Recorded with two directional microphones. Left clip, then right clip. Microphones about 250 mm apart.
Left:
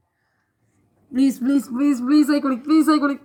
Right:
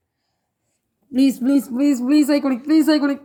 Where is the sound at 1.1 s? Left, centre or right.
Centre.